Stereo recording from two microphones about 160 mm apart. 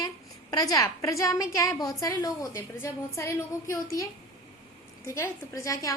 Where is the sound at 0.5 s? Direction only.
20° left (ahead or behind).